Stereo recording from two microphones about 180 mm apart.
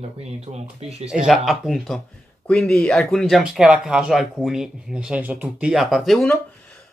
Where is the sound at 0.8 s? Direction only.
35° right (ahead or behind).